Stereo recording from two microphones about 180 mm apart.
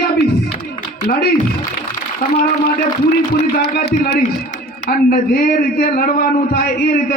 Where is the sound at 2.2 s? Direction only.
45° left (ahead or behind).